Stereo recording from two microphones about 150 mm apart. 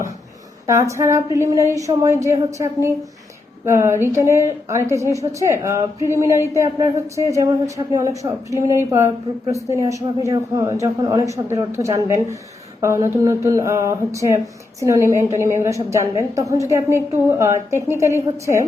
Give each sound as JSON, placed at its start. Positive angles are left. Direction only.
{"t": 0.7, "sound": "speech", "side_deg": -20}